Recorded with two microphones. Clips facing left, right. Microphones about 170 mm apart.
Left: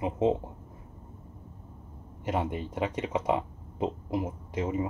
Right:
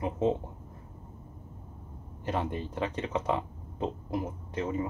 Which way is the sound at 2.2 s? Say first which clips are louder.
Left 2 dB; 20° left (ahead or behind).